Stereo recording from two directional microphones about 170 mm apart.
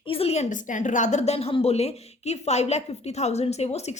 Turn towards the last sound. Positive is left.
turn(degrees=40)  # may be behind; listen again after turning